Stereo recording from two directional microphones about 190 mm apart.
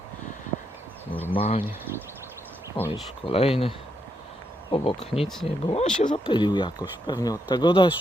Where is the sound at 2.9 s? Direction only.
30° left (ahead or behind).